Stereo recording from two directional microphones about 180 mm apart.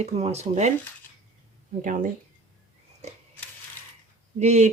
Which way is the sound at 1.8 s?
45° right (ahead or behind).